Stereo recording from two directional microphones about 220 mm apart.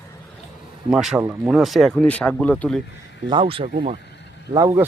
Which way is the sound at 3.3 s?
25° right (ahead or behind).